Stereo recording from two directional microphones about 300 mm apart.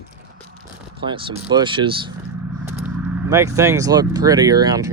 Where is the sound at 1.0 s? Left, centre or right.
Centre.